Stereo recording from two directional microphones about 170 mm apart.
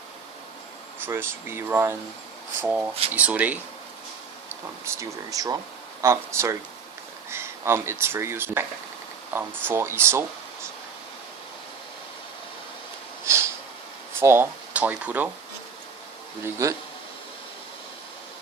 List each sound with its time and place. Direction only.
1.0 s speech: 15° right (ahead or behind)
4.9 s speech: 20° right (ahead or behind)
14.2 s speech: 15° right (ahead or behind)
16.4 s speech: 20° right (ahead or behind)